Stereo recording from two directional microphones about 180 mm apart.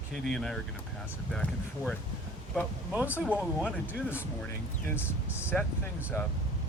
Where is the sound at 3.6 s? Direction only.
10° left (ahead or behind).